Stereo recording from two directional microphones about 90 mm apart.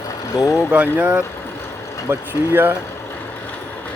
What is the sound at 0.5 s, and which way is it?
Speech, 15° right (ahead or behind).